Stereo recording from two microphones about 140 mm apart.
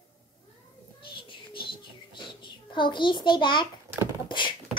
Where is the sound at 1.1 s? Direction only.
35° left (ahead or behind).